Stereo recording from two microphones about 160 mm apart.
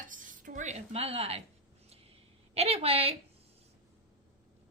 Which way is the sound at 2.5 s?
40° right (ahead or behind).